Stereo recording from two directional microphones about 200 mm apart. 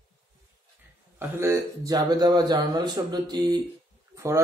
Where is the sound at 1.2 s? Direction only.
15° right (ahead or behind).